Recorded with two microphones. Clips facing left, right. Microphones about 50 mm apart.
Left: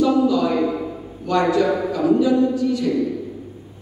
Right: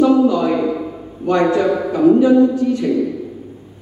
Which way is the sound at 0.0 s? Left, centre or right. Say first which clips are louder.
Right 4 dB; right.